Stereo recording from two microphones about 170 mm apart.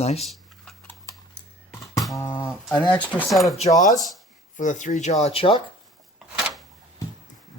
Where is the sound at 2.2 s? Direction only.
25° left (ahead or behind).